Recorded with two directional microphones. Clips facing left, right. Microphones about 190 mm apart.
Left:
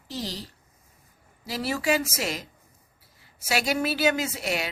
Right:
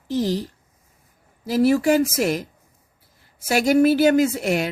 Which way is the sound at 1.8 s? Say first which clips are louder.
Right 8 dB; 55° right (ahead or behind).